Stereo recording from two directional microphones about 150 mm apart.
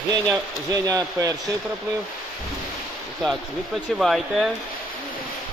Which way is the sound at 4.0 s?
Centre (ahead or behind).